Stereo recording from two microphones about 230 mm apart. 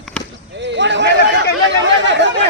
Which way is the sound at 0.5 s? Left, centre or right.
Right.